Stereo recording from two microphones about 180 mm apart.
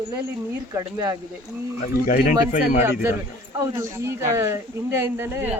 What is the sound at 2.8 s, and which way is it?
Speech, 15° right (ahead or behind).